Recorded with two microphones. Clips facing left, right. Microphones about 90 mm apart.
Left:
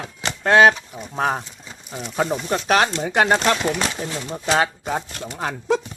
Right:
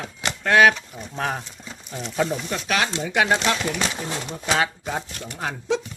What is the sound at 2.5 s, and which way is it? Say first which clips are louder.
Speech: left 6 dB; 40° left (ahead or behind).